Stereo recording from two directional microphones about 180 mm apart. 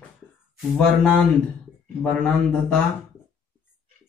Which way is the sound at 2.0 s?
5° left (ahead or behind).